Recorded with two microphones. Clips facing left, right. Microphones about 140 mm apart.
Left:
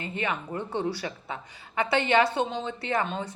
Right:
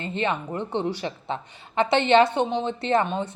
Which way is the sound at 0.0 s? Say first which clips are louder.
Right 5 dB; 25° right (ahead or behind).